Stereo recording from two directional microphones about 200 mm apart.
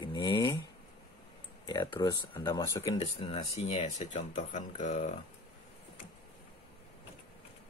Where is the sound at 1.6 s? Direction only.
20° left (ahead or behind).